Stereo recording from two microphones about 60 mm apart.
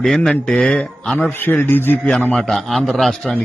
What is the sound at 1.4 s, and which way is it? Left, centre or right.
Speech, left.